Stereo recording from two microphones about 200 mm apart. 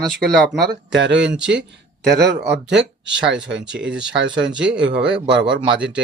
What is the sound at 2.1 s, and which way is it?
Speech, centre (ahead or behind).